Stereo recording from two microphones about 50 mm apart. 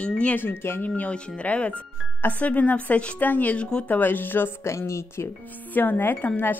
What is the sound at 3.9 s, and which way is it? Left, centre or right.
Speech, left.